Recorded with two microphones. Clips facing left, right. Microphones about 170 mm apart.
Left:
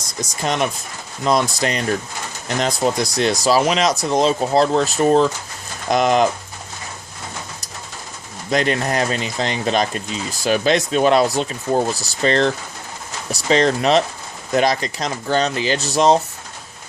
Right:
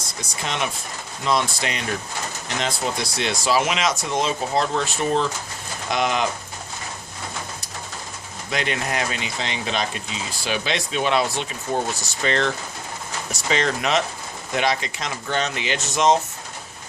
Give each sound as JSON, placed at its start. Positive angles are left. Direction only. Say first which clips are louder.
{"t": 0.2, "sound": "speech", "louder": "left 6 dB", "side_deg": 40}
{"t": 8.4, "sound": "speech", "louder": "left 7 dB", "side_deg": 40}